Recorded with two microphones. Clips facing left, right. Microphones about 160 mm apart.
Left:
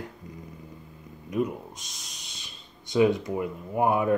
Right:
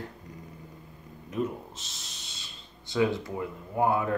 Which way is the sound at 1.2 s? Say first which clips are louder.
Left 3 dB; 15° left (ahead or behind).